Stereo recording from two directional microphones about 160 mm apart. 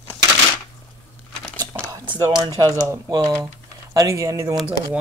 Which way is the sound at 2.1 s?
25° right (ahead or behind).